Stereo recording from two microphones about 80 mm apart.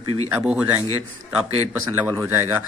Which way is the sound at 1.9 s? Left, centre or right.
Right.